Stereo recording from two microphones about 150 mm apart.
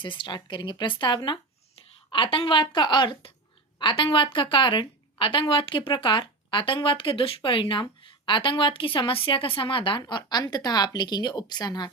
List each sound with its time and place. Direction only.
0.0 s a woman's voice: 35° left (ahead or behind)